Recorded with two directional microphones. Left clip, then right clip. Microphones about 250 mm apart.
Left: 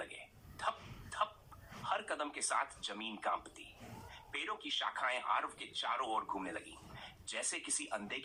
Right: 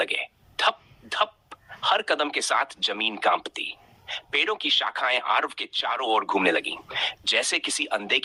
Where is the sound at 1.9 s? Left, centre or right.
Right.